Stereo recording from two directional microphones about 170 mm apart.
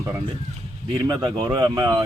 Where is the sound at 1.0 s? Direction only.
20° right (ahead or behind).